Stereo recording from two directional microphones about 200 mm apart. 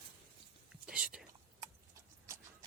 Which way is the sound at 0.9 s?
5° right (ahead or behind).